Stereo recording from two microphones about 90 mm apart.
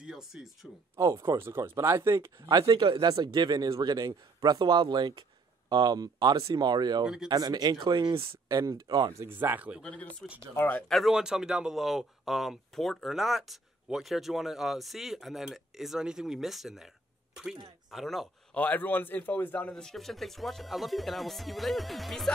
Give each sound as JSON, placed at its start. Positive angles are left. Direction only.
{"t": 0.0, "sound": "a sound", "side_deg": -5}
{"t": 0.9, "sound": "speech", "side_deg": -35}
{"t": 2.5, "sound": "speech", "side_deg": -50}
{"t": 8.5, "sound": "speech", "side_deg": -45}
{"t": 9.2, "sound": "speech", "side_deg": -25}
{"t": 9.8, "sound": "speech", "side_deg": 10}
{"t": 10.5, "sound": "a man's voice", "side_deg": 25}
{"t": 10.9, "sound": "a man's voice", "side_deg": 0}
{"t": 17.9, "sound": "a man's voice", "side_deg": 0}
{"t": 18.5, "sound": "a man's voice", "side_deg": 20}
{"t": 19.7, "sound": "a man's voice", "side_deg": 5}